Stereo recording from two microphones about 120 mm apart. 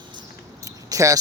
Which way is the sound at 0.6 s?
25° right (ahead or behind).